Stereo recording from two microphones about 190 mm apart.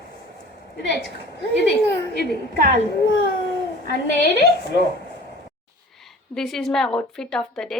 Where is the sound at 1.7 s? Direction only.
60° left (ahead or behind).